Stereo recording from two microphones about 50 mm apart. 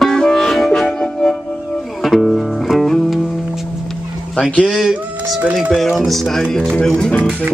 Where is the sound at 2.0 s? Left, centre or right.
Centre.